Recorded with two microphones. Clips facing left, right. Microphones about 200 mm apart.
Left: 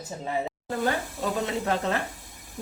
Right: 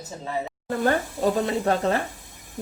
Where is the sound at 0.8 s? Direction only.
35° right (ahead or behind).